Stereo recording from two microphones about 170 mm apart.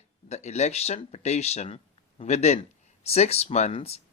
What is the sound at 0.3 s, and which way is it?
Speech, 40° left (ahead or behind).